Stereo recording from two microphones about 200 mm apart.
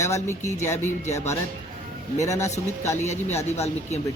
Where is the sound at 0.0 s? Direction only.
15° left (ahead or behind).